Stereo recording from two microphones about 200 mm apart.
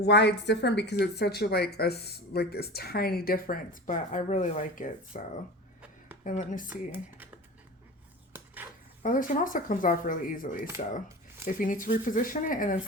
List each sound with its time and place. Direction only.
0.0 s speech: 60° left (ahead or behind); by 5.2 s 40° left (ahead or behind)
6.2 s speech: 40° left (ahead or behind)
6.7 s speech: 10° right (ahead or behind)
8.3 s dishes: 10° right (ahead or behind)
9.0 s speech: 40° left (ahead or behind)